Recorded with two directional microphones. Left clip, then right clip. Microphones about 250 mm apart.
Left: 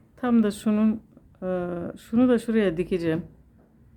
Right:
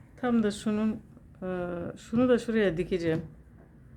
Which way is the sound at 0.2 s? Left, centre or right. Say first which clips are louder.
Left 4 dB; centre.